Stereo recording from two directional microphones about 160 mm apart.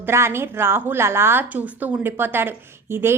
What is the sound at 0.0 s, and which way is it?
A woman's voice, 15° right (ahead or behind).